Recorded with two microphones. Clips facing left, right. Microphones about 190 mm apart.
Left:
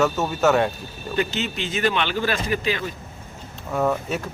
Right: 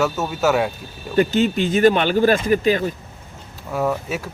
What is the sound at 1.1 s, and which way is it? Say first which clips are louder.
Speech: right 8 dB; 50° right (ahead or behind).